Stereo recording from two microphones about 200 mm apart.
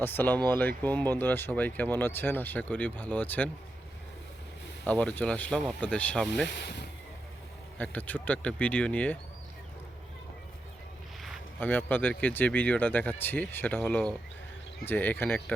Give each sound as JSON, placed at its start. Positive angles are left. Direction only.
{"t": 0.0, "sound": "speech", "side_deg": 10}
{"t": 4.9, "sound": "speech", "side_deg": 5}
{"t": 6.6, "sound": "speech", "side_deg": 60}
{"t": 7.8, "sound": "speech", "side_deg": 10}
{"t": 11.2, "sound": "speech", "side_deg": 5}